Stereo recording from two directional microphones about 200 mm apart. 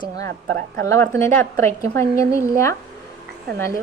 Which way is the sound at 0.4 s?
45° right (ahead or behind).